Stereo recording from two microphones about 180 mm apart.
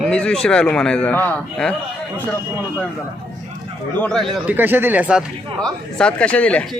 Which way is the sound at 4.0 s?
5° left (ahead or behind).